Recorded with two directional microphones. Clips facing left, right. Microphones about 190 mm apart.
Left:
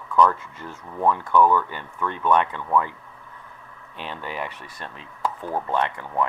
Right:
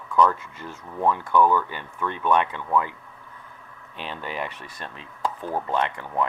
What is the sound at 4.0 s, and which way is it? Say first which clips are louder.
Speech: even; 15° right (ahead or behind).